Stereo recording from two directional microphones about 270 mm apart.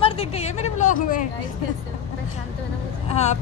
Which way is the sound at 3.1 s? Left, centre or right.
Left.